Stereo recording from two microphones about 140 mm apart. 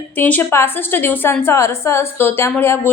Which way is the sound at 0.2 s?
15° left (ahead or behind).